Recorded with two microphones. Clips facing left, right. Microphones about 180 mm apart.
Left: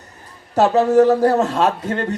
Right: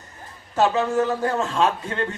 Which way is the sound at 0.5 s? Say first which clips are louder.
Left 7 dB; 40° left (ahead or behind).